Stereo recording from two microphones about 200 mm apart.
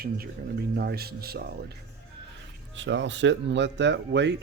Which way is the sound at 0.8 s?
50° right (ahead or behind).